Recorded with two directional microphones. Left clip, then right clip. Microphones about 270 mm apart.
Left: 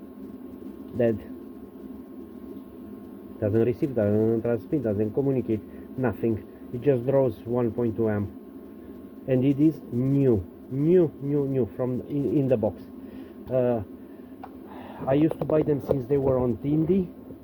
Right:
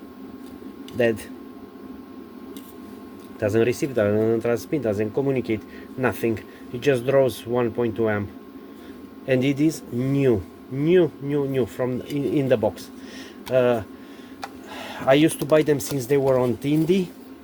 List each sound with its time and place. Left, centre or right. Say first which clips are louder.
3.4 s speech: right 3 dB; centre
9.2 s speech: right 2 dB; centre